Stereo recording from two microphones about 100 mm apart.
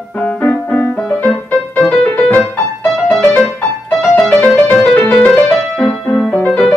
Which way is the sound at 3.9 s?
10° left (ahead or behind).